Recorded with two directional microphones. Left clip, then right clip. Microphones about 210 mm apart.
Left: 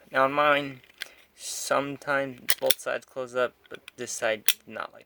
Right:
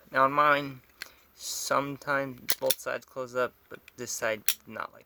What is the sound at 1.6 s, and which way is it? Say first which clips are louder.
Speech: left 2 dB; 30° right (ahead or behind).